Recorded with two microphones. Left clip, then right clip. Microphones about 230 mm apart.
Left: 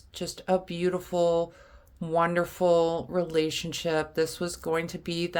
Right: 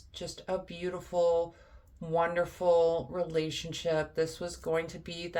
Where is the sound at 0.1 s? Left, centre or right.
Left.